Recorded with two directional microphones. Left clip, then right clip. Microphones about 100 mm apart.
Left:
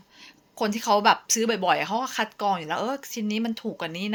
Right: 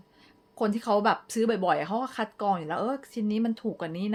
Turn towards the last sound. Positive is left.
turn(degrees=-40)  # may be behind; listen again after turning